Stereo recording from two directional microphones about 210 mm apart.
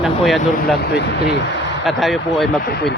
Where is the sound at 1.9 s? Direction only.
Centre (ahead or behind).